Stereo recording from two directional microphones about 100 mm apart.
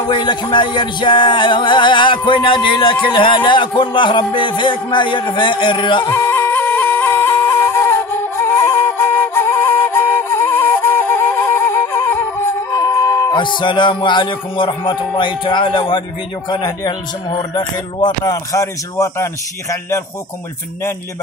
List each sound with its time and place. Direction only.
0.1 s music: 50° left (ahead or behind)
6.0 s music: 25° left (ahead or behind)
13.3 s music: 50° left (ahead or behind)
16.4 s speech: 45° left (ahead or behind); by 20.0 s 30° left (ahead or behind)